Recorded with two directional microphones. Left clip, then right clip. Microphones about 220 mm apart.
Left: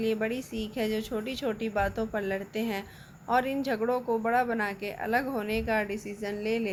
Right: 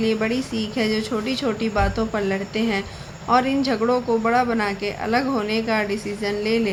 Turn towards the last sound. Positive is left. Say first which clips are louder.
# right 9 dB
turn(degrees=15)  # may be behind; listen again after turning